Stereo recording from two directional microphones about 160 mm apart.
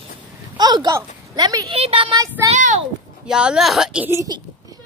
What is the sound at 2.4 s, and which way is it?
Speech, 45° right (ahead or behind).